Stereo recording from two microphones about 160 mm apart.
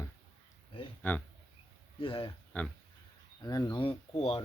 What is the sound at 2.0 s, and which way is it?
Speech, 30° left (ahead or behind).